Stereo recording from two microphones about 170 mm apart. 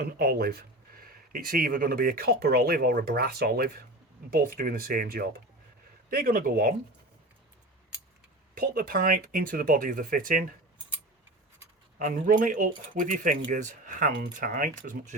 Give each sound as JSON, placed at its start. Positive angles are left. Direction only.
{"t": 0.0, "sound": "speech", "side_deg": -65}
{"t": 8.5, "sound": "speech", "side_deg": -55}
{"t": 11.9, "sound": "speech", "side_deg": -50}